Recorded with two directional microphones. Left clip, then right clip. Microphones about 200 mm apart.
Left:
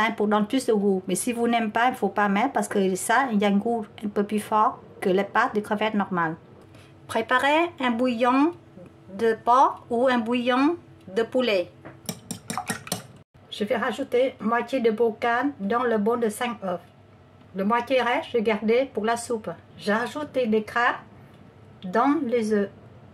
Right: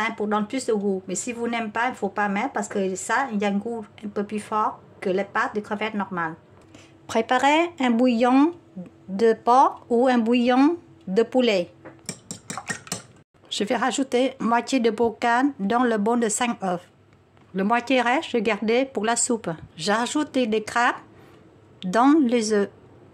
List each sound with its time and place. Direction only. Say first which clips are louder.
0.0 s speech: left 2 dB; 10° left (ahead or behind)
7.1 s speech: right 2 dB; 30° right (ahead or behind)
13.5 s speech: right 2 dB; 55° right (ahead or behind)